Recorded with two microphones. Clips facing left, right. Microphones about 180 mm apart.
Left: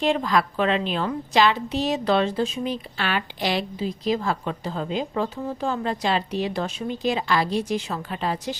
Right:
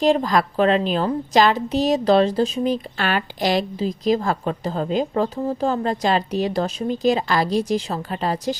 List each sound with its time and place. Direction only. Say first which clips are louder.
0.0 s a woman's voice: right 4 dB; 40° right (ahead or behind)